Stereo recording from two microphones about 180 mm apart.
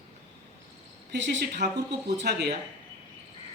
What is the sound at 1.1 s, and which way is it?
Speech, 75° right (ahead or behind).